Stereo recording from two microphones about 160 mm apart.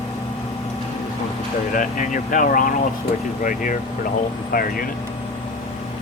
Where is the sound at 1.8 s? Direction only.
55° left (ahead or behind).